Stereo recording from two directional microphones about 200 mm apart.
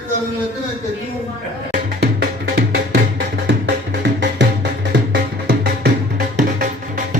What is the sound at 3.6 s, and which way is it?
Music, 60° right (ahead or behind).